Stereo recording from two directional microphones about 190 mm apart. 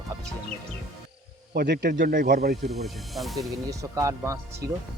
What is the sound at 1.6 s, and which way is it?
Speech, 55° right (ahead or behind).